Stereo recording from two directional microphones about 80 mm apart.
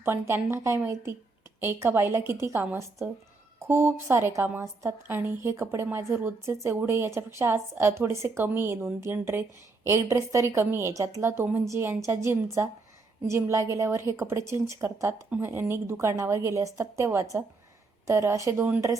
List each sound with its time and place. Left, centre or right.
0.0 s a woman's voice: right
15.3 s a woman's voice: right